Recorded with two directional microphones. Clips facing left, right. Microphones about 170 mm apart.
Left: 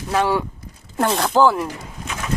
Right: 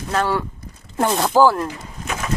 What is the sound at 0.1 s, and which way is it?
Speech, 10° left (ahead or behind).